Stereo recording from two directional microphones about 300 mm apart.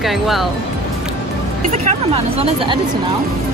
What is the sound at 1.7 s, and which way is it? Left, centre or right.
Speech, centre.